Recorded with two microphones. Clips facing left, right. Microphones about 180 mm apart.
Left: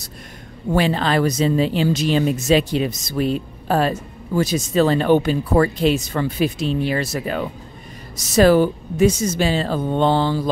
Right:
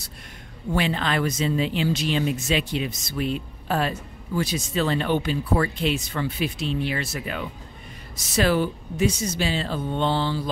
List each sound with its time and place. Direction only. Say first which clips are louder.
0.7 s speech: left 6 dB; 40° left (ahead or behind)